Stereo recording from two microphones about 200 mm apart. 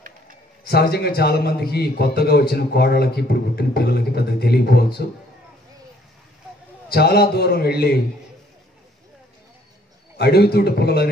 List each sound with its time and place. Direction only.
0.7 s a man's voice: 55° left (ahead or behind)
6.9 s a man's voice: 50° left (ahead or behind)
10.1 s a man's voice: 55° left (ahead or behind)